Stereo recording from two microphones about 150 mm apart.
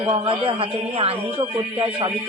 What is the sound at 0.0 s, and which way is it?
A man's voice, 35° right (ahead or behind).